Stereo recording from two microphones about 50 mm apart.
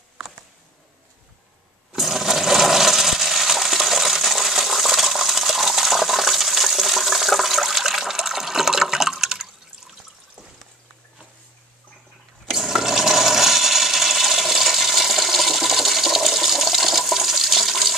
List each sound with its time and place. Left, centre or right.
1.9 s toilet flush: centre
12.5 s toilet flush: centre